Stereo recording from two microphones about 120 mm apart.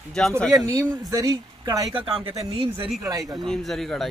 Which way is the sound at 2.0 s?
50° right (ahead or behind).